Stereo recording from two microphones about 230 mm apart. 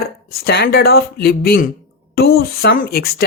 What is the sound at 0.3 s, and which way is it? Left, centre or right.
Speech, left.